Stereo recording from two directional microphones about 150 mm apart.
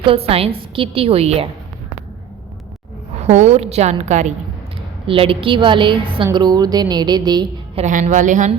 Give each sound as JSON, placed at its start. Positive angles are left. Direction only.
{"t": 0.0, "sound": "a woman's voice", "side_deg": -40}
{"t": 3.2, "sound": "a woman's voice", "side_deg": -50}
{"t": 5.0, "sound": "a woman's voice", "side_deg": -35}
{"t": 7.8, "sound": "a woman's voice", "side_deg": -50}